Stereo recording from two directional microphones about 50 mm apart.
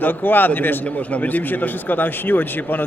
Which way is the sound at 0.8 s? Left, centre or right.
Left.